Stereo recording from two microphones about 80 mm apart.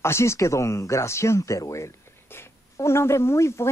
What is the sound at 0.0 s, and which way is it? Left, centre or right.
Speech, left.